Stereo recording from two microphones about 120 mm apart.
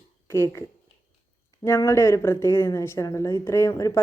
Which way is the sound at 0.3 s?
20° left (ahead or behind).